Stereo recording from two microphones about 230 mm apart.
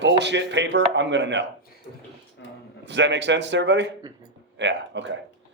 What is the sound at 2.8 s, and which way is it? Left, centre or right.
A man's voice, right.